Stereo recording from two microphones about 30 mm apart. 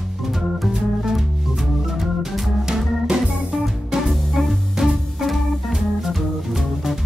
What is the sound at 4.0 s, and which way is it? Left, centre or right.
Music, centre.